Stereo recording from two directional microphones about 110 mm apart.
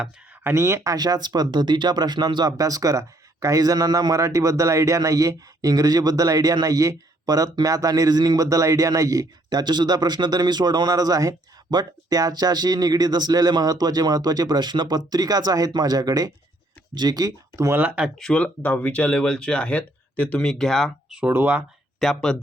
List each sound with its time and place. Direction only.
0.4 s speech: 25° right (ahead or behind)
17.7 s speech: 15° right (ahead or behind)
18.2 s speech: 10° left (ahead or behind)
21.1 s speech: 10° right (ahead or behind)
21.9 s speech: 5° left (ahead or behind)